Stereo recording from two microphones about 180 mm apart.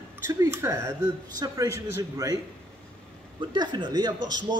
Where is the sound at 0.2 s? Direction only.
15° right (ahead or behind).